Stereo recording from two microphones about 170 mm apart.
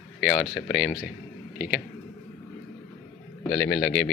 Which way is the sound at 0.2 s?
Centre (ahead or behind).